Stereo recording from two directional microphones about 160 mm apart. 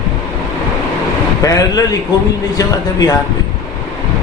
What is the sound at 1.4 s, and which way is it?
A man's voice, 20° left (ahead or behind).